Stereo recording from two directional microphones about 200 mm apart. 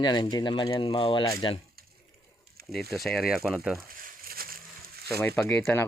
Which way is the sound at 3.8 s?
45° right (ahead or behind).